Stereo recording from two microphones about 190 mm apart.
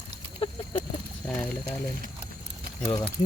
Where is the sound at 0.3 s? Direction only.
25° left (ahead or behind).